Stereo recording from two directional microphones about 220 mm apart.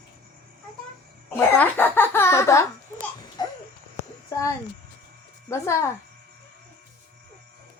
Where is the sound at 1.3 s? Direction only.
10° left (ahead or behind).